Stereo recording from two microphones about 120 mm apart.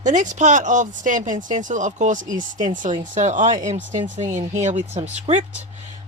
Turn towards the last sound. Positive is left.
turn(degrees=-70)  # may be behind; listen again after turning